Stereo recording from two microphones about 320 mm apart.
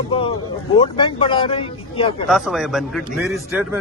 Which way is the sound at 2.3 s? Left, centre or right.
Centre.